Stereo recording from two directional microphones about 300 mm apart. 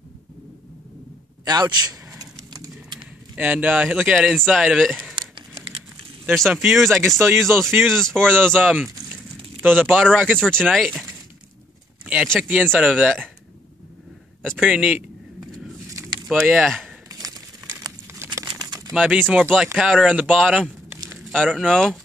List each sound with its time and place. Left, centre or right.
1.4 s speech: centre
5.1 s a sound: centre
6.2 s speech: centre
14.4 s a sound: centre
17.1 s crumpling: centre
18.9 s speech: centre